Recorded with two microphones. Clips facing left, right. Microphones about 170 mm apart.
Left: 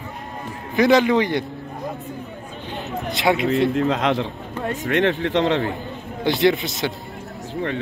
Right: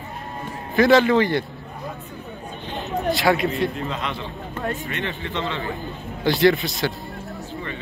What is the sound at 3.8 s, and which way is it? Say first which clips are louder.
A man's voice: left 9 dB; 90° left.